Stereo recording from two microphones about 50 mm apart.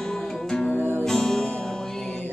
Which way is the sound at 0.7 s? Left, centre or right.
Right.